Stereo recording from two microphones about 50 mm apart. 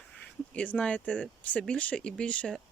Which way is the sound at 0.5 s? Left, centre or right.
Left.